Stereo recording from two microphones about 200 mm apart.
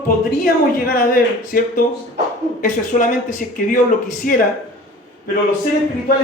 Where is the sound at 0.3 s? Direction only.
45° left (ahead or behind).